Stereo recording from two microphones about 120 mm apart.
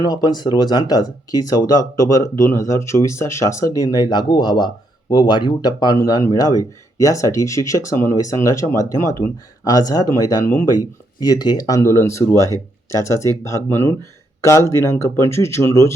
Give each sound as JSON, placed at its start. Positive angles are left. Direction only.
{"t": 0.0, "sound": "speech", "side_deg": 35}
{"t": 11.2, "sound": "speech", "side_deg": 30}